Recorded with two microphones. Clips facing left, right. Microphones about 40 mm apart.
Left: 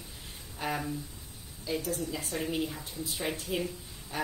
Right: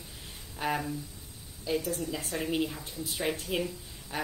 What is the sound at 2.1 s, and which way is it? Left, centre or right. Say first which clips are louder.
Speech: right 2 dB; right.